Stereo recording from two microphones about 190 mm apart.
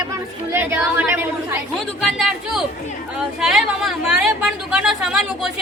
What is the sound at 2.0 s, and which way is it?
A woman's voice, centre (ahead or behind).